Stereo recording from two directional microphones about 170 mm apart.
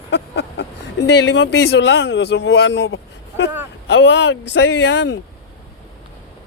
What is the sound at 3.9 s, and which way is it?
Speech, 90° left.